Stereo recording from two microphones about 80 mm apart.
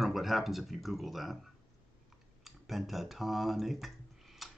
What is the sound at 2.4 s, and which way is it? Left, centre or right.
Speech, centre.